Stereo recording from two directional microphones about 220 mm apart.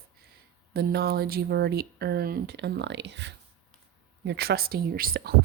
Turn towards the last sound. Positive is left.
turn(degrees=-45)  # may be behind; listen again after turning